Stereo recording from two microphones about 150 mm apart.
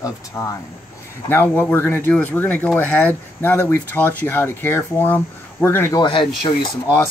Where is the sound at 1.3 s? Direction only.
10° left (ahead or behind).